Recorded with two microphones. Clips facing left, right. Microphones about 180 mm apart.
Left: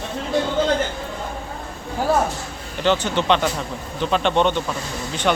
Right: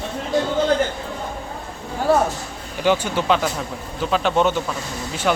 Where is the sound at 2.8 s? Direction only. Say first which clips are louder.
Even; 10° right (ahead or behind).